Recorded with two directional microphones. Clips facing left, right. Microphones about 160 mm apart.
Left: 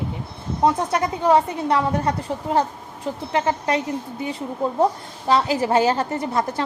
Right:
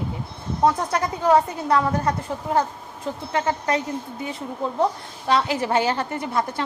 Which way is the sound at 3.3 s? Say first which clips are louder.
Left 2 dB; 30° left (ahead or behind).